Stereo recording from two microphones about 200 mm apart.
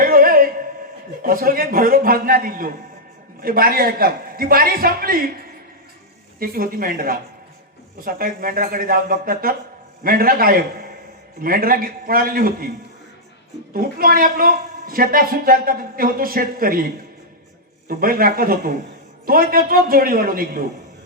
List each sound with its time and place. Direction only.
0.0 s a sound: 45° right (ahead or behind)
1.2 s a woman's voice: 45° right (ahead or behind)
6.4 s a woman's voice: 45° right (ahead or behind)
13.7 s a woman's voice: 45° right (ahead or behind)